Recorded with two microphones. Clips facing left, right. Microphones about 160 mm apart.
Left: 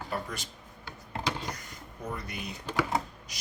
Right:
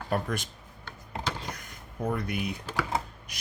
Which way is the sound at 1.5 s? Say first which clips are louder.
Even; 55° right (ahead or behind).